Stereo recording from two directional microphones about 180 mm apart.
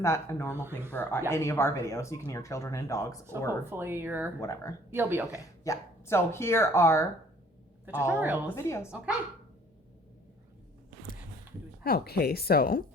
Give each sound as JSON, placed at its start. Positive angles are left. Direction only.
{"t": 0.0, "sound": "speech", "side_deg": 15}
{"t": 3.7, "sound": "speech", "side_deg": -10}
{"t": 4.4, "sound": "speech", "side_deg": 15}
{"t": 4.9, "sound": "speech", "side_deg": -10}
{"t": 5.6, "sound": "speech", "side_deg": 15}
{"t": 8.1, "sound": "speech", "side_deg": -10}
{"t": 8.5, "sound": "speech", "side_deg": 15}
{"t": 11.8, "sound": "speech", "side_deg": 55}